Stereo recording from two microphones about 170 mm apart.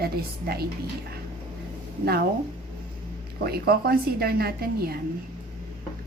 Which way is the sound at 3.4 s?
65° right (ahead or behind).